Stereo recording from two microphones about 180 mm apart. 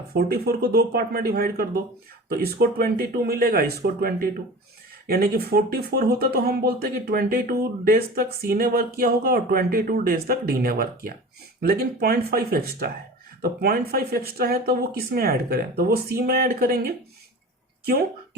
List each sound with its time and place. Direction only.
0.1 s speech: 60° right (ahead or behind)